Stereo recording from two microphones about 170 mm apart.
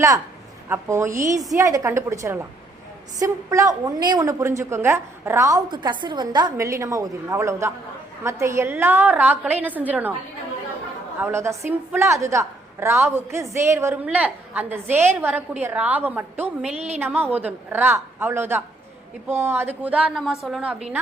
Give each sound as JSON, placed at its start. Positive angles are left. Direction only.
{"t": 0.7, "sound": "a woman's voice", "side_deg": -15}
{"t": 11.2, "sound": "a woman's voice", "side_deg": -15}
{"t": 16.6, "sound": "a woman's voice", "side_deg": -40}
{"t": 17.0, "sound": "a woman's voice", "side_deg": -10}